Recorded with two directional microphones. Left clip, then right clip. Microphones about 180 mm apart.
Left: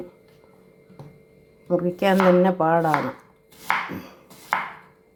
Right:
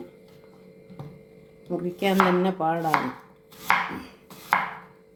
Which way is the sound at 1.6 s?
15° left (ahead or behind).